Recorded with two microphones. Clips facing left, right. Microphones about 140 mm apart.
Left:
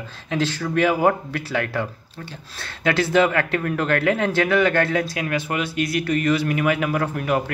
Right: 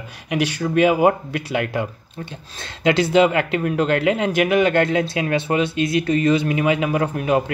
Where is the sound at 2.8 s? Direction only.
20° right (ahead or behind).